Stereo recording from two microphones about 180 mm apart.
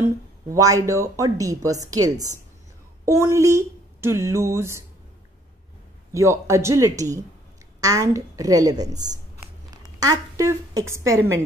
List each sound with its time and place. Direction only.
0.0 s speech: 20° right (ahead or behind)
6.1 s speech: 15° right (ahead or behind)